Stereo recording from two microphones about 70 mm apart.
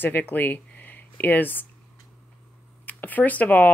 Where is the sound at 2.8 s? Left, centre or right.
Left.